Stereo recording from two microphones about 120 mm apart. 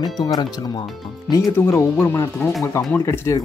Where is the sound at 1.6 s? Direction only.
20° left (ahead or behind).